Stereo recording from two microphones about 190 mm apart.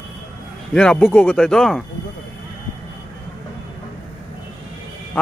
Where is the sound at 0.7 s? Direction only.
5° left (ahead or behind).